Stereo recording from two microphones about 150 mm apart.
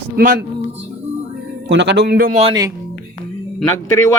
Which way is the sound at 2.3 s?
40° right (ahead or behind).